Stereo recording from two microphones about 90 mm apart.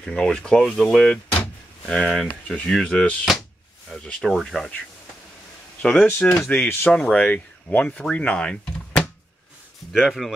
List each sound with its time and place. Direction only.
0.0 s speech: 5° left (ahead or behind)
5.8 s speech: 15° left (ahead or behind)
6.9 s speech: 10° left (ahead or behind)